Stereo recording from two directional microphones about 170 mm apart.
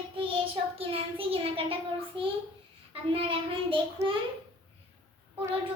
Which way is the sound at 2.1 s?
30° right (ahead or behind).